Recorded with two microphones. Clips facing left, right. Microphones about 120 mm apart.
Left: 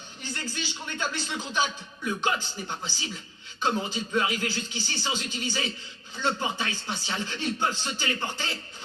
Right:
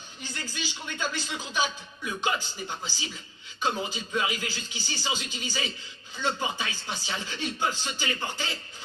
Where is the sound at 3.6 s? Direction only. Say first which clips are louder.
Left 2 dB; 5° right (ahead or behind).